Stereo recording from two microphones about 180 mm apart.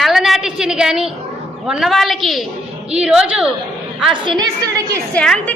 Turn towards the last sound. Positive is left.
turn(degrees=5)  # may be behind; listen again after turning